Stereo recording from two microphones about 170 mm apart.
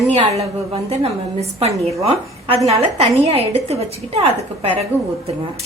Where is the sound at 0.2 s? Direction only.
35° right (ahead or behind).